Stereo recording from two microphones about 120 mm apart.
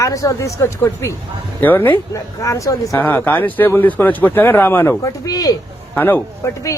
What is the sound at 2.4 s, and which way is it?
Speech, 25° left (ahead or behind).